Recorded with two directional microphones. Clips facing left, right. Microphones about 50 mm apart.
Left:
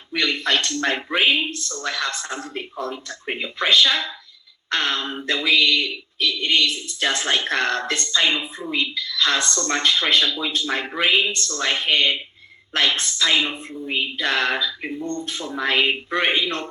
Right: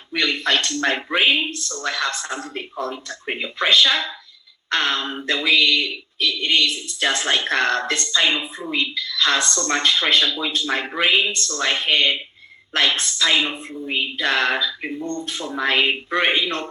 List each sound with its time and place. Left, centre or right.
0.1 s speech: right